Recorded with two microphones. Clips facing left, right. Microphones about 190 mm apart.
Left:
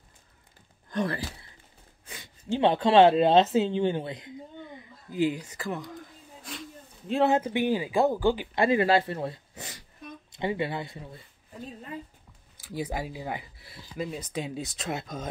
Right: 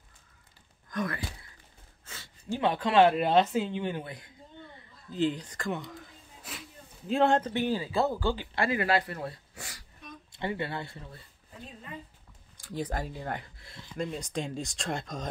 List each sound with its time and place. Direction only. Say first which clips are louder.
0.8 s speech: left 4 dB; 30° left (ahead or behind)
2.0 s a sound: left 4 dB; 15° left (ahead or behind)
2.6 s speech: left 4 dB; 30° left (ahead or behind)
12.5 s speech: left 1 dB; 5° left (ahead or behind)